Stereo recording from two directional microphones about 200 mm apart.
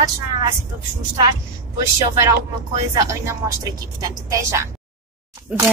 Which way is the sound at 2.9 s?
15° right (ahead or behind).